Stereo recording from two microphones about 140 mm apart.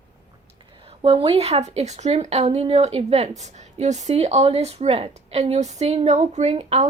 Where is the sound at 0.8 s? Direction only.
40° right (ahead or behind).